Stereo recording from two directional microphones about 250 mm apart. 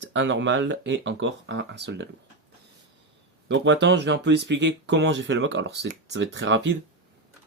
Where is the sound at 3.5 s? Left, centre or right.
Right.